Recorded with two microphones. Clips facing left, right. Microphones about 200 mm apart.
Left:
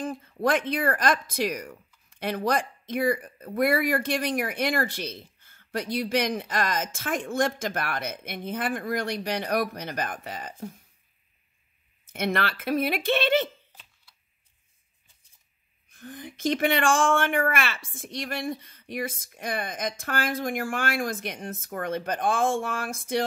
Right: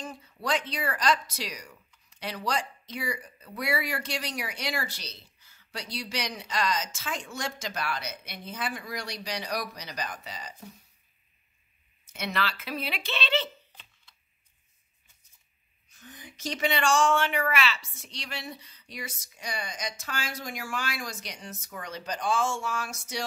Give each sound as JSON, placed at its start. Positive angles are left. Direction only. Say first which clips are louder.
{"t": 0.0, "sound": "speech", "louder": "left 9 dB", "side_deg": 50}
{"t": 12.1, "sound": "speech", "louder": "left 5 dB", "side_deg": 55}
{"t": 15.9, "sound": "speech", "louder": "left 9 dB", "side_deg": 55}